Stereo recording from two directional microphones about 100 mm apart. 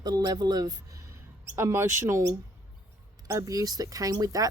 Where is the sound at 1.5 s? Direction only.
25° right (ahead or behind).